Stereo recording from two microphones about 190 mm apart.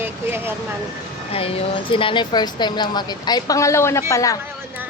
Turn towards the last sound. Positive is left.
turn(degrees=15)  # may be behind; listen again after turning